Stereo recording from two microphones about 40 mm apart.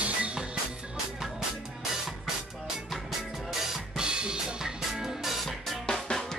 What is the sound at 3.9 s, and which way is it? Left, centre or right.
Drum kit, right.